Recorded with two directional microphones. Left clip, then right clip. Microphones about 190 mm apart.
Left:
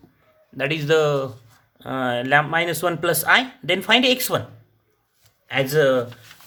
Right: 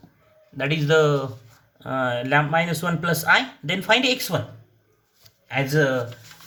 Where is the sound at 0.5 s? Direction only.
40° left (ahead or behind).